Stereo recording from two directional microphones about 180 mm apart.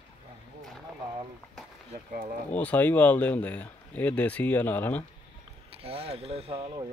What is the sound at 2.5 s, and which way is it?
Speech, 10° left (ahead or behind).